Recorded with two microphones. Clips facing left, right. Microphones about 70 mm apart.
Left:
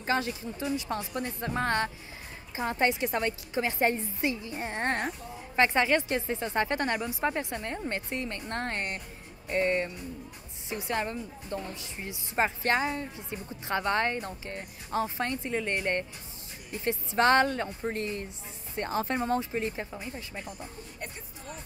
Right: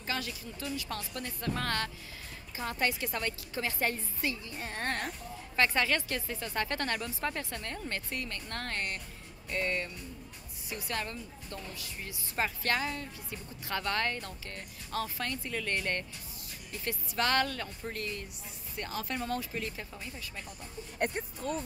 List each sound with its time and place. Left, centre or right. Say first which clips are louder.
0.0 s a woman's voice: left 7 dB; left
21.0 s speech: right 11 dB; right